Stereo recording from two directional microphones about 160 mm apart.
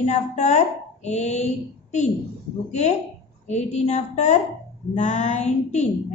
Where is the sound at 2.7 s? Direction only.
45° left (ahead or behind).